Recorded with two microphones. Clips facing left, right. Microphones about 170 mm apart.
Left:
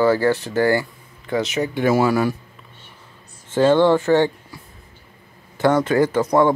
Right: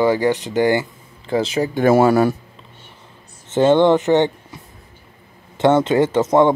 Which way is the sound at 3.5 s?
20° right (ahead or behind).